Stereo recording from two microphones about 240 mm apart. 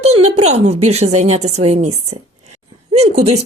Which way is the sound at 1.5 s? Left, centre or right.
Right.